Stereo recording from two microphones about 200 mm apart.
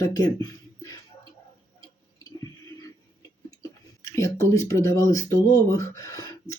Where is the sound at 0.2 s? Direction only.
15° left (ahead or behind).